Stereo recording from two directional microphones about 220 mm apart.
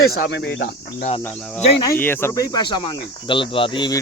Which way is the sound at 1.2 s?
5° left (ahead or behind).